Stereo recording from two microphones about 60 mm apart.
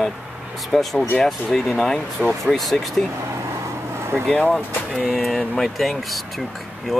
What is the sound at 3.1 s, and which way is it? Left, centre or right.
Vehicle, right.